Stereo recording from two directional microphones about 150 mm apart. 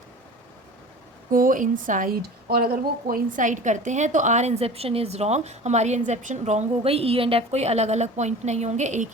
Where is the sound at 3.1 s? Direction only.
60° right (ahead or behind).